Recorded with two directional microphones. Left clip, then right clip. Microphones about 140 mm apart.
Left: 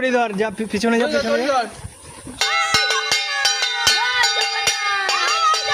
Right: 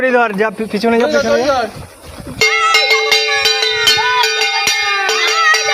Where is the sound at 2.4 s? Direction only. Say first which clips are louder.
Right 7 dB; 50° left (ahead or behind).